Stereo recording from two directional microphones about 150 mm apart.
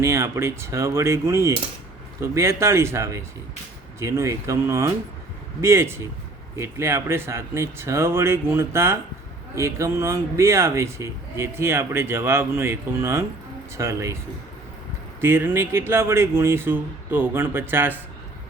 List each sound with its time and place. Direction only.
0.0 s speech: 20° right (ahead or behind)
15.2 s speech: 15° right (ahead or behind)